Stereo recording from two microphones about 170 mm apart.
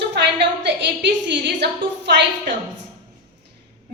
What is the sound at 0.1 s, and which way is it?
A woman's voice, 90° right.